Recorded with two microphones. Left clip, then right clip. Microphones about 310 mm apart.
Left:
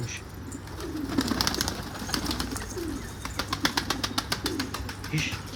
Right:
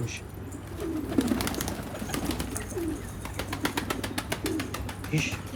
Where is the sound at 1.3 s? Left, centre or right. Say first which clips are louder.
Left 4 dB; centre.